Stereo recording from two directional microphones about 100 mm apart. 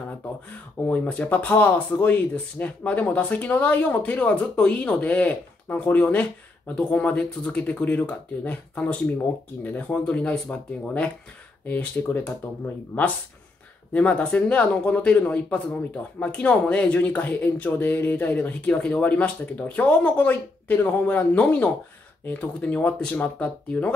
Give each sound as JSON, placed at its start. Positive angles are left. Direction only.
{"t": 0.8, "sound": "speech", "side_deg": 15}
{"t": 13.9, "sound": "speech", "side_deg": 15}